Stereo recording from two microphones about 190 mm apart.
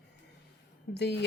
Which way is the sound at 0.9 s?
65° left (ahead or behind).